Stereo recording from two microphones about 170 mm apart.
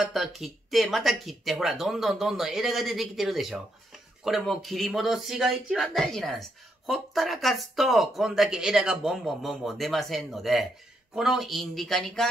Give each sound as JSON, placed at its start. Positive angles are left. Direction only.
{"t": 0.0, "sound": "speech", "side_deg": 0}